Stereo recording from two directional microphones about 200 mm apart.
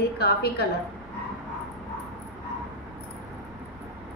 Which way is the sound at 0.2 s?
55° left (ahead or behind).